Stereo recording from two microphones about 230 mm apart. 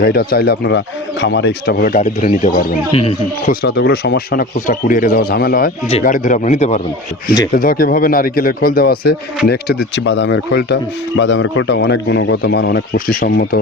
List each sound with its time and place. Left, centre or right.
0.0 s speech: left
3.5 s speech: left